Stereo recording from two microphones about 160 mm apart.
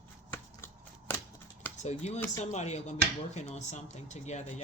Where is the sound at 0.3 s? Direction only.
15° left (ahead or behind).